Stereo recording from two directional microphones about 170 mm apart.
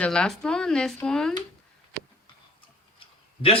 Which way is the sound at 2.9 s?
35° left (ahead or behind).